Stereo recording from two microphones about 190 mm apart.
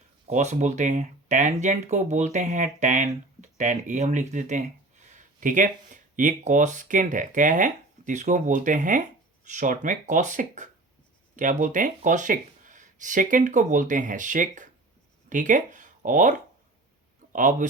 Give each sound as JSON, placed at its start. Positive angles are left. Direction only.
{"t": 0.3, "sound": "speech", "side_deg": -40}
{"t": 17.3, "sound": "speech", "side_deg": -40}